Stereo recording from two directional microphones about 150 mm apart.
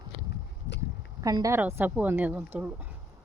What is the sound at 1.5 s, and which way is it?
Speech, 15° right (ahead or behind).